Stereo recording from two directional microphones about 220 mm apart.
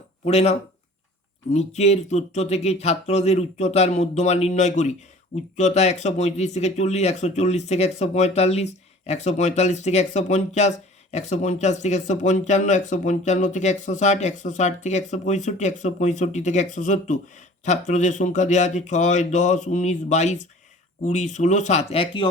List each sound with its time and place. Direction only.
0.3 s speech: 30° left (ahead or behind)
1.5 s speech: 30° left (ahead or behind)